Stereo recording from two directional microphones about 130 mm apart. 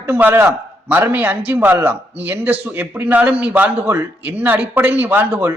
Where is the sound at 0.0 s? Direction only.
15° right (ahead or behind).